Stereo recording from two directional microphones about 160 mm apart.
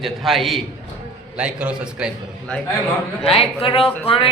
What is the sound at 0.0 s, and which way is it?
A man's voice, centre (ahead or behind).